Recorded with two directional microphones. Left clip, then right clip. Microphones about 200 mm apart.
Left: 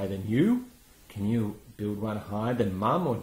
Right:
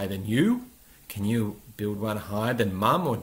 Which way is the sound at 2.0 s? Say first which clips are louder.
Right 4 dB; 15° right (ahead or behind).